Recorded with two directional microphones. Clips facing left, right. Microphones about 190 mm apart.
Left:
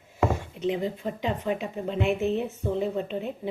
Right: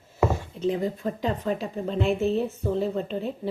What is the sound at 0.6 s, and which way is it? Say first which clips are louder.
Speech: right 3 dB; 40° right (ahead or behind).